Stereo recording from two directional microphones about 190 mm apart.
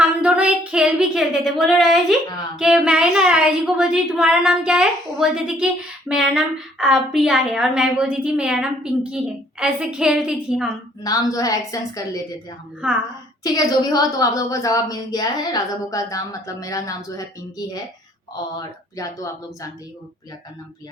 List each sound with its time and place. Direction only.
0.2 s female singing: 5° right (ahead or behind)
2.6 s a woman's voice: 5° right (ahead or behind)
11.0 s a woman's voice: 20° left (ahead or behind)
12.8 s a woman's voice: 5° right (ahead or behind)
13.4 s a woman's voice: 20° left (ahead or behind)
18.9 s a woman's voice: 20° left (ahead or behind)